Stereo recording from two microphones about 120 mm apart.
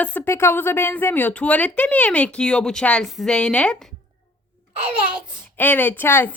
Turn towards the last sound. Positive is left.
turn(degrees=20)  # may be behind; listen again after turning